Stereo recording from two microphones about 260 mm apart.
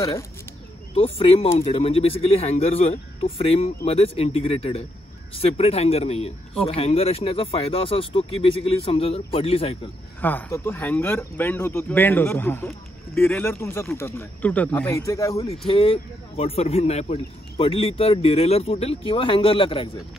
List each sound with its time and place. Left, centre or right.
0.9 s speech: left
10.2 s speech: centre